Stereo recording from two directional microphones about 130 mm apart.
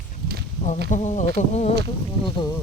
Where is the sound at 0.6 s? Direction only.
65° left (ahead or behind).